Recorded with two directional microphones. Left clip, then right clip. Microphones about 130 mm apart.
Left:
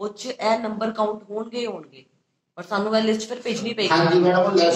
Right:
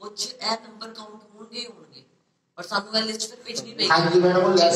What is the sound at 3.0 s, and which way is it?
A man's voice, 20° left (ahead or behind).